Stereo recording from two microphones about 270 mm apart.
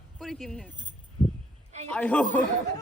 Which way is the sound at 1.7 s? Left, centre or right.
Right.